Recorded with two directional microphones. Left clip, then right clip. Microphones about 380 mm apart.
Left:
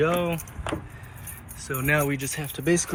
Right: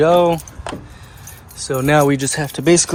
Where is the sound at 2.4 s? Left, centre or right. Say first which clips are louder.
Right 10 dB; centre.